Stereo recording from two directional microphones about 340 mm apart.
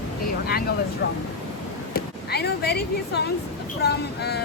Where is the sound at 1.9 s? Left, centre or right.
Left.